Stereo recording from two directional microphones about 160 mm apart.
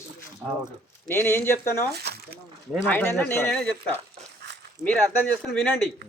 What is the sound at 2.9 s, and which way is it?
Speech, 15° left (ahead or behind).